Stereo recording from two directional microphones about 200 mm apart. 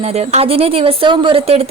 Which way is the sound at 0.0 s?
30° right (ahead or behind).